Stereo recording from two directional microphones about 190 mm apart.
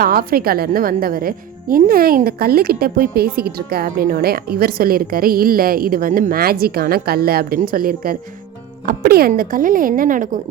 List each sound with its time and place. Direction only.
0.0 s a woman's voice: 50° right (ahead or behind)